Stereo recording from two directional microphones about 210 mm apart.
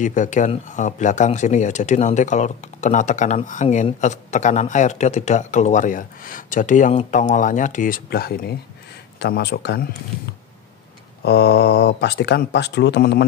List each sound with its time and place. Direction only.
0.0 s speech: 35° left (ahead or behind); by 9.8 s 50° left (ahead or behind)
11.2 s speech: 50° left (ahead or behind)